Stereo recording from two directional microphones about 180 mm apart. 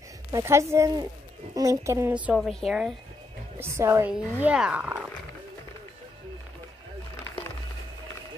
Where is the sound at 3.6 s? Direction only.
15° right (ahead or behind).